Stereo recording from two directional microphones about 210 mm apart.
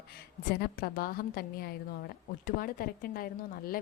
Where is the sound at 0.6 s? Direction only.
45° left (ahead or behind).